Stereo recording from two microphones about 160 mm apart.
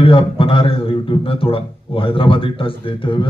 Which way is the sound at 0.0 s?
35° left (ahead or behind).